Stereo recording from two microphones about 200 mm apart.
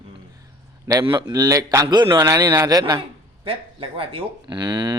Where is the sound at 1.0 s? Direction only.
20° right (ahead or behind).